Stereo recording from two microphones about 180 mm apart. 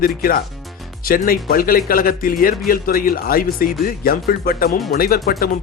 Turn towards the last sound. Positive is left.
turn(degrees=55)  # may be behind; listen again after turning